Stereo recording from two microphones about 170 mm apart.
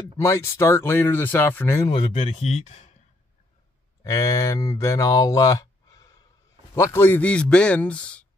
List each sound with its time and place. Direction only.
0.2 s speech: 15° left (ahead or behind)
2.1 s speech: 45° left (ahead or behind)
4.0 s speech: 20° left (ahead or behind)